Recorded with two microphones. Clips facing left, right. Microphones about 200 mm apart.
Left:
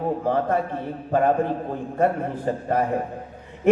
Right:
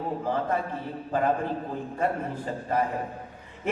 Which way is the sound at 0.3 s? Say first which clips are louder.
Left 4 dB; 55° left (ahead or behind).